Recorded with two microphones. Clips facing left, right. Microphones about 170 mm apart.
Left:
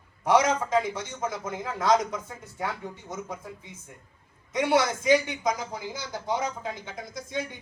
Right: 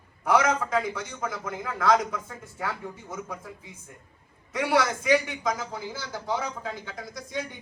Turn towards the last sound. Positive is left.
turn(degrees=20)  # may be behind; listen again after turning